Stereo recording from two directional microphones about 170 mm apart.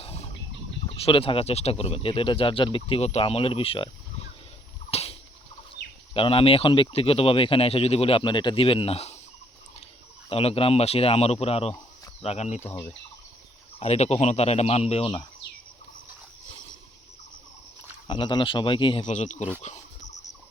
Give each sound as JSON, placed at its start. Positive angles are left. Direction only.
{"t": 0.0, "sound": "a sound", "side_deg": 35}
{"t": 0.9, "sound": "speech", "side_deg": 35}
{"t": 4.9, "sound": "a sound", "side_deg": 35}
{"t": 5.8, "sound": "chicken", "side_deg": 90}
{"t": 6.1, "sound": "speech", "side_deg": 30}
{"t": 10.2, "sound": "speech", "side_deg": 35}
{"t": 13.7, "sound": "speech", "side_deg": 40}
{"t": 18.1, "sound": "speech", "side_deg": 25}
{"t": 19.0, "sound": "speech", "side_deg": 45}
{"t": 19.6, "sound": "a sound", "side_deg": 45}